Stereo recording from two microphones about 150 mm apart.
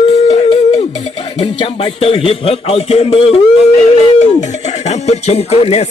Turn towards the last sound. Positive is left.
turn(degrees=45)  # may be behind; listen again after turning